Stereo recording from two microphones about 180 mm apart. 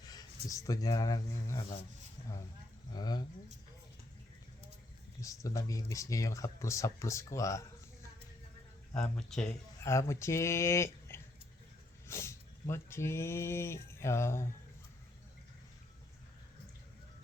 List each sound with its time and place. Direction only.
0.0 s a sound: 20° left (ahead or behind)
0.4 s speech: 20° left (ahead or behind)
2.9 s speech: 20° left (ahead or behind)
5.2 s speech: 20° left (ahead or behind)
8.9 s speech: 5° left (ahead or behind)
9.8 s speech: 15° left (ahead or behind)